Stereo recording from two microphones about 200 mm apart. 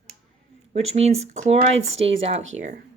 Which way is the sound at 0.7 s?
30° right (ahead or behind).